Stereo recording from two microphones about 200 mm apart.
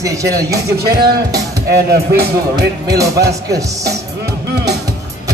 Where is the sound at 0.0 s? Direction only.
15° right (ahead or behind).